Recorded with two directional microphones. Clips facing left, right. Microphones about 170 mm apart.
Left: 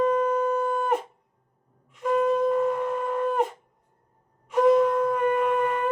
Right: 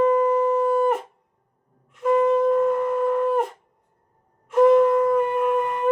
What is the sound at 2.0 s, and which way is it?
Shofar, centre (ahead or behind).